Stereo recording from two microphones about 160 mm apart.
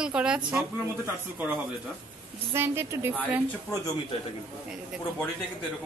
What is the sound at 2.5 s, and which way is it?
Speech, 15° right (ahead or behind).